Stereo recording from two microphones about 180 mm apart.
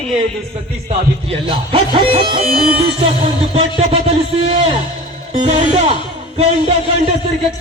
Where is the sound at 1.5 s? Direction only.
30° right (ahead or behind).